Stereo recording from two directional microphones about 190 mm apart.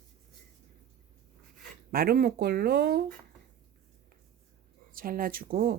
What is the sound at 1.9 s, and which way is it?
Speech, 50° right (ahead or behind).